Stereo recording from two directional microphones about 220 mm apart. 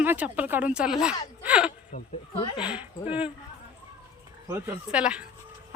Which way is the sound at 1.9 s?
25° left (ahead or behind).